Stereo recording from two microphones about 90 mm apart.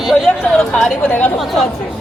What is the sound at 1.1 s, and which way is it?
Speech, 20° left (ahead or behind).